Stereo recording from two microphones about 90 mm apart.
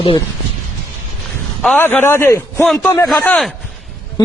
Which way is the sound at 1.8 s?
25° left (ahead or behind).